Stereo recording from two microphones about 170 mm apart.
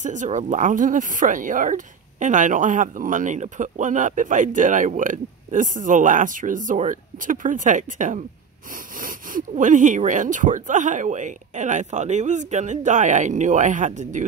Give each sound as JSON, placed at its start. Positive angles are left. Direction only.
{"t": 0.0, "sound": "speech", "side_deg": -45}